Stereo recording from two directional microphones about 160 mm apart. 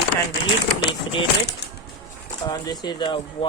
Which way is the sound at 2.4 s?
25° left (ahead or behind).